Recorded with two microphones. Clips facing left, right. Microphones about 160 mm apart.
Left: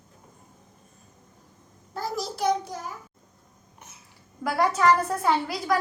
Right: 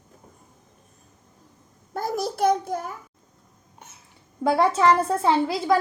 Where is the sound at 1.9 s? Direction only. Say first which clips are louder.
Right 4 dB; 50° right (ahead or behind).